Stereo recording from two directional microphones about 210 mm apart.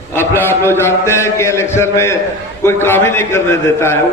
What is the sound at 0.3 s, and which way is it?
A man's voice, 10° left (ahead or behind).